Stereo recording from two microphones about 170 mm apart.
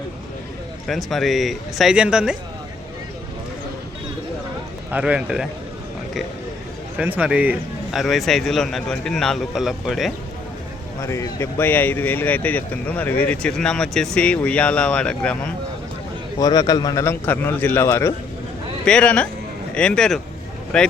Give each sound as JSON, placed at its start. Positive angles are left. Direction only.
{"t": 0.9, "sound": "a man's voice", "side_deg": 0}
{"t": 4.9, "sound": "speech", "side_deg": -10}
{"t": 6.9, "sound": "a man's voice", "side_deg": -10}
{"t": 11.0, "sound": "speech", "side_deg": 15}
{"t": 16.4, "sound": "a man's voice", "side_deg": 20}